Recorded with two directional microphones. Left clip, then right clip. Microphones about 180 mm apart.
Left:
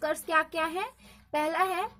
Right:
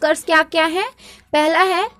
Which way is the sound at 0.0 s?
35° right (ahead or behind).